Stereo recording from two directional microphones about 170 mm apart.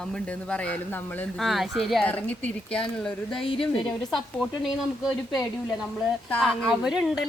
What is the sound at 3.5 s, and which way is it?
Speech, 30° left (ahead or behind).